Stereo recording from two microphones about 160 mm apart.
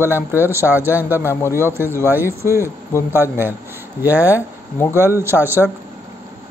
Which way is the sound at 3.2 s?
15° right (ahead or behind).